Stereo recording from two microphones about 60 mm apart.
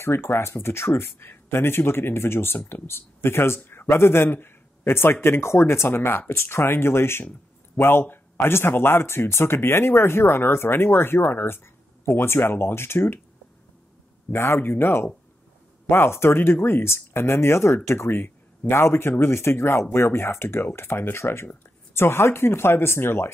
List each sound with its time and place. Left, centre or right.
0.0 s a man's voice: left
14.3 s a man's voice: left